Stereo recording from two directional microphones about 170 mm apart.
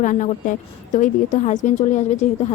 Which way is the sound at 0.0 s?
50° left (ahead or behind).